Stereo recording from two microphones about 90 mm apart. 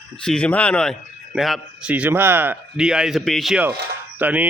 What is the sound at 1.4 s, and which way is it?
Speech, centre (ahead or behind).